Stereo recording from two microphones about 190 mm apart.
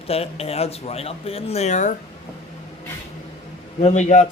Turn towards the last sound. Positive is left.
turn(degrees=40)  # may be behind; listen again after turning